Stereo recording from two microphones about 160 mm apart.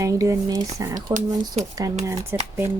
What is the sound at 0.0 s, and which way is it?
Speech, 20° right (ahead or behind).